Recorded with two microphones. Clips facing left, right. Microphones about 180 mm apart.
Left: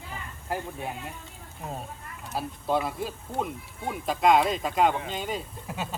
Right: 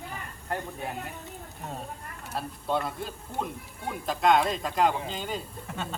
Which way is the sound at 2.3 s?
Centre (ahead or behind).